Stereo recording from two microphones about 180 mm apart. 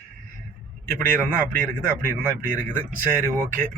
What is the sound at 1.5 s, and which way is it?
Speech, 50° right (ahead or behind).